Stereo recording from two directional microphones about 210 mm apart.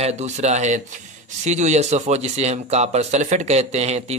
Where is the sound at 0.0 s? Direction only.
30° right (ahead or behind).